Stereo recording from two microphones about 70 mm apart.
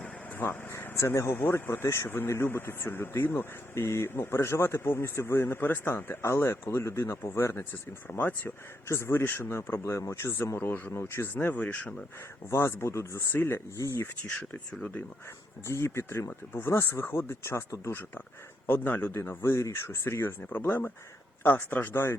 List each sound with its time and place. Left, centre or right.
0.0 s vehicle: left
0.9 s speech: left
12.5 s speech: left
14.7 s speech: centre
15.6 s speech: left